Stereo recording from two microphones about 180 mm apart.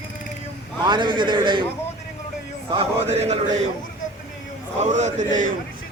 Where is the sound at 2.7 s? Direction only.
35° right (ahead or behind).